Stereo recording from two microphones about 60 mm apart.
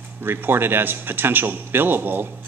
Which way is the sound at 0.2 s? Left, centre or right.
Right.